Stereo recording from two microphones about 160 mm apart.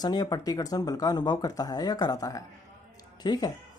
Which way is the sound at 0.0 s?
25° left (ahead or behind).